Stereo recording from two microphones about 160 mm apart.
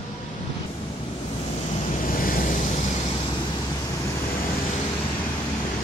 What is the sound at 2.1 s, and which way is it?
Waves, 60° left (ahead or behind).